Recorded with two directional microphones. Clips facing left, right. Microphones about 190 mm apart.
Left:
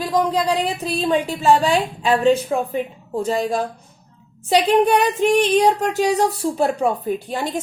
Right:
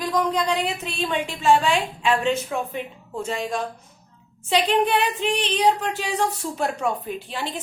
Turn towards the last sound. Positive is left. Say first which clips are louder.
# left 7 dB
turn(degrees=45)  # may be behind; listen again after turning